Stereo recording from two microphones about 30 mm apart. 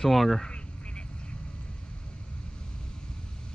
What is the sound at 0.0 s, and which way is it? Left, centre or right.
Speech, centre.